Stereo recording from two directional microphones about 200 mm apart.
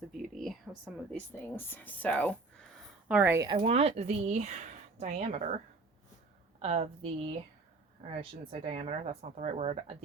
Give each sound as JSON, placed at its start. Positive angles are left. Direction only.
{"t": 0.3, "sound": "a sound", "side_deg": 0}
{"t": 1.1, "sound": "speech", "side_deg": 10}
{"t": 3.1, "sound": "speech", "side_deg": -10}
{"t": 3.4, "sound": "speech", "side_deg": -25}
{"t": 6.6, "sound": "speech", "side_deg": -30}